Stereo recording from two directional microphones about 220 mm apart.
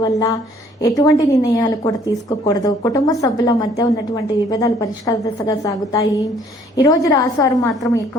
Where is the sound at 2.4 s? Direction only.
15° left (ahead or behind).